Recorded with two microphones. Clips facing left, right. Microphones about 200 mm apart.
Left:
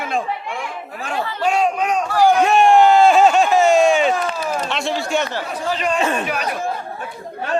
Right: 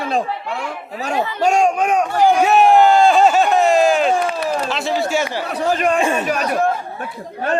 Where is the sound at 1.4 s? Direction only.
45° right (ahead or behind).